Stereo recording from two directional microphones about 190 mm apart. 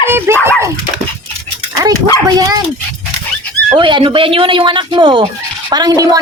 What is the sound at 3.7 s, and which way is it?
A woman's voice, 25° right (ahead or behind).